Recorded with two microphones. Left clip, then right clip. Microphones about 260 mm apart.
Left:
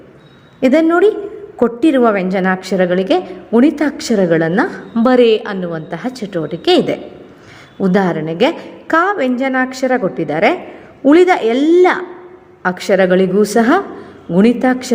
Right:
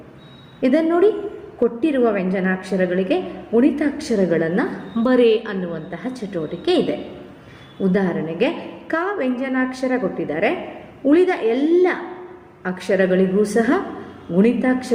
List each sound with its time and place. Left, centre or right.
0.6 s a woman's voice: left